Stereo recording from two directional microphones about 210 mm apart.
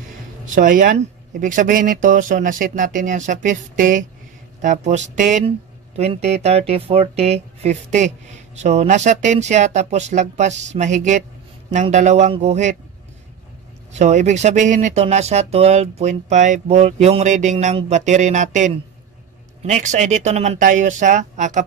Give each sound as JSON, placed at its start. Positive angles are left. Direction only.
{"t": 0.6, "sound": "speech", "side_deg": -40}
{"t": 13.9, "sound": "speech", "side_deg": -35}